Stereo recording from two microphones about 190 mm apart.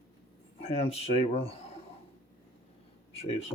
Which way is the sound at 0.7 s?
35° left (ahead or behind).